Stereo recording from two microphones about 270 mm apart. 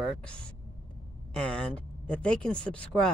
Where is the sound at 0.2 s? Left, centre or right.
Centre.